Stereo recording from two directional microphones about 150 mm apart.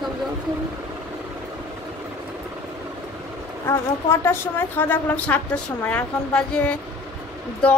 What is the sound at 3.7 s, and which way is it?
A woman's voice, 15° left (ahead or behind).